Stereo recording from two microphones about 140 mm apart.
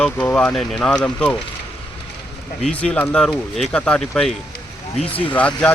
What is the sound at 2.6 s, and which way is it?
Speech, 10° left (ahead or behind).